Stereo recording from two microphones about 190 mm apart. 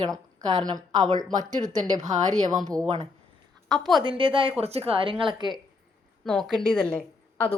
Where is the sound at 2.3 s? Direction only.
20° right (ahead or behind).